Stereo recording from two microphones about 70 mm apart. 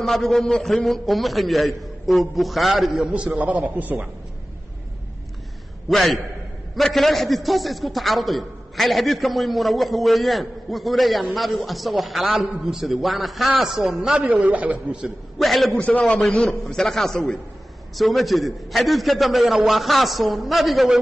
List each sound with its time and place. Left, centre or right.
0.0 s a man's voice: centre
3.1 s a man's voice: centre
5.9 s a man's voice: centre
14.4 s a man's voice: right
15.3 s a man's voice: centre
15.7 s a man's voice: centre
16.4 s a man's voice: centre